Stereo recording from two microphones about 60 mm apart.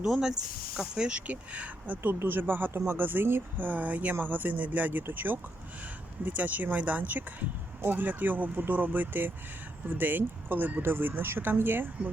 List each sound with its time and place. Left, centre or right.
0.0 s speech: centre; by 2.0 s right
2.0 s speech: right